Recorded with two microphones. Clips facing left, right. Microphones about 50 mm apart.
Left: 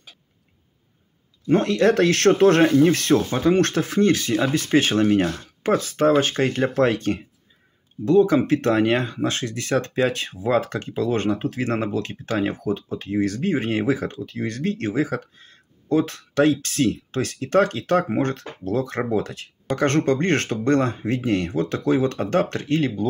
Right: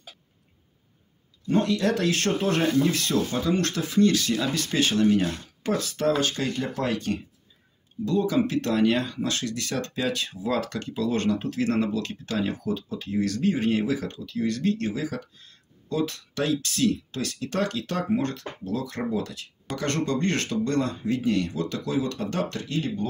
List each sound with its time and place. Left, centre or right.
1.5 s speech: left
2.7 s speech: left